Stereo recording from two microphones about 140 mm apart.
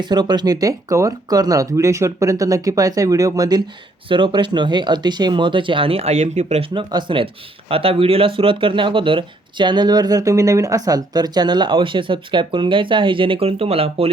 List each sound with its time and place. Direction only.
0.0 s speech: 30° right (ahead or behind); by 6.7 s 55° right (ahead or behind)
6.7 s speech: 35° right (ahead or behind)